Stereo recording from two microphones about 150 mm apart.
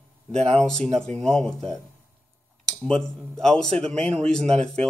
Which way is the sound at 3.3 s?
5° left (ahead or behind).